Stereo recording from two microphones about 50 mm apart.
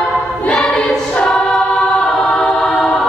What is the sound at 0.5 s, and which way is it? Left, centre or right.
Choir, centre.